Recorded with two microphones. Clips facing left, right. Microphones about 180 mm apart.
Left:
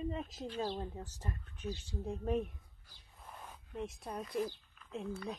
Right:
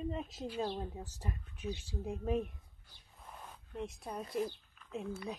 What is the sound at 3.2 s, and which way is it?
Zipper, centre (ahead or behind).